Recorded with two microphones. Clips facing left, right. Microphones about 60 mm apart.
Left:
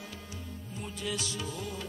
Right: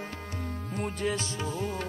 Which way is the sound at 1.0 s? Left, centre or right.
Right.